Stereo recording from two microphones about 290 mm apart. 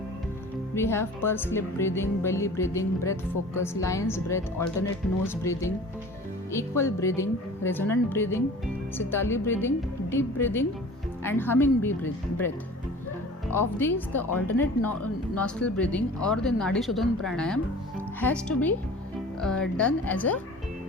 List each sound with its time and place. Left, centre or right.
0.8 s speech: centre
13.7 s speech: centre
14.3 s speech: left
15.4 s speech: centre